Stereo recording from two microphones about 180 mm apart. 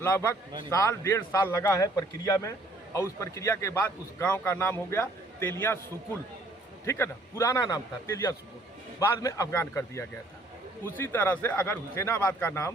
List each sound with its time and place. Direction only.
0.0 s a man's voice: 15° left (ahead or behind)
6.8 s a man's voice: 15° left (ahead or behind)